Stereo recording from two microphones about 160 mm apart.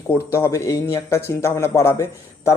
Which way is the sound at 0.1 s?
15° left (ahead or behind).